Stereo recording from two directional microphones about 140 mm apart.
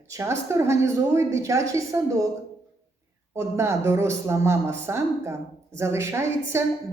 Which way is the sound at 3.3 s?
20° right (ahead or behind).